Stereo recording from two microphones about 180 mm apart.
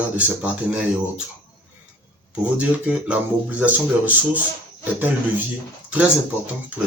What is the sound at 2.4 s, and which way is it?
Speech, 10° right (ahead or behind).